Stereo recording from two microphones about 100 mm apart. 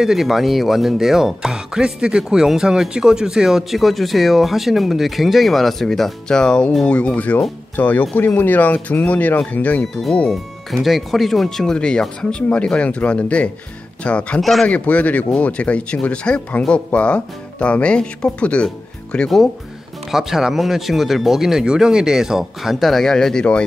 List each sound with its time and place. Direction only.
0.0 s speech: 5° right (ahead or behind); by 9.8 s 15° left (ahead or behind)
10.3 s speech: centre (ahead or behind)
14.4 s speech: centre (ahead or behind)
14.7 s speech: 15° left (ahead or behind)